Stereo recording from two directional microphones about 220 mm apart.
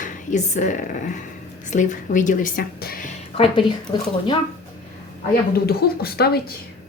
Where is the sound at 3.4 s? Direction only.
25° left (ahead or behind).